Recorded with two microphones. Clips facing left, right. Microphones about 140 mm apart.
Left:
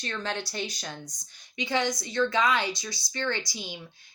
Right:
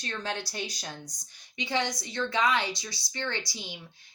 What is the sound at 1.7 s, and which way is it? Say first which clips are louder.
A woman's voice: left 3 dB; 25° right (ahead or behind).